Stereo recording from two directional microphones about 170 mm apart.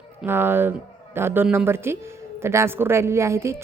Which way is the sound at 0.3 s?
15° right (ahead or behind).